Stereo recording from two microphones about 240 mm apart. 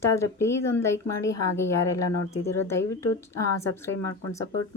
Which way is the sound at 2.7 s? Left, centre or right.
Centre.